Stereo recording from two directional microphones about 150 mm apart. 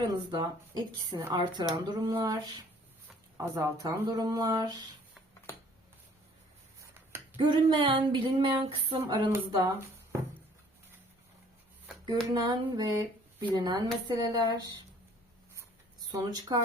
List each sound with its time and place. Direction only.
0.0 s speech: 30° right (ahead or behind)
7.3 s female singing: 35° right (ahead or behind)
9.5 s speech: 25° right (ahead or behind)
12.0 s speech: 25° right (ahead or behind)
16.1 s speech: 25° right (ahead or behind)